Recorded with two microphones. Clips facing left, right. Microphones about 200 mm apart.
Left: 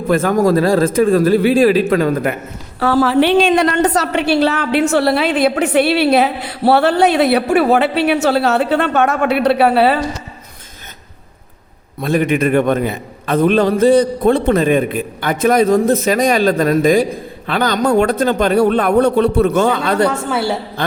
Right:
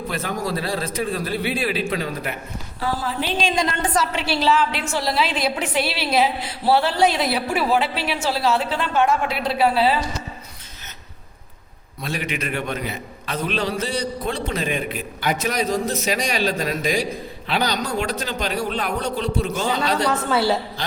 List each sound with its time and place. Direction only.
0.1 s a man's voice: 50° left (ahead or behind)
2.8 s a woman's voice: 75° left (ahead or behind)
11.9 s a man's voice: 55° left (ahead or behind)